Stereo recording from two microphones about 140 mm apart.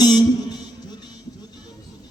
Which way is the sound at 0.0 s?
30° left (ahead or behind).